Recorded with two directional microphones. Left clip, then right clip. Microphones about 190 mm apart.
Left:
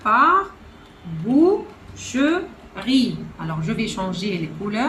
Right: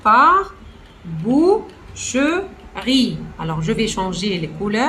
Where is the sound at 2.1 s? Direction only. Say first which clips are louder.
Right 2 dB; 30° right (ahead or behind).